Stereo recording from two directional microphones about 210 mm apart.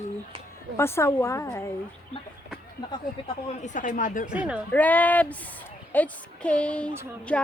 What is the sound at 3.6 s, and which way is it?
Speech, 35° left (ahead or behind).